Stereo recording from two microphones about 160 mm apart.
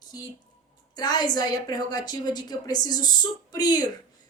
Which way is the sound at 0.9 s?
25° left (ahead or behind).